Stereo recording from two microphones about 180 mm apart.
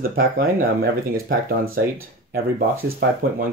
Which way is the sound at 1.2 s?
55° right (ahead or behind).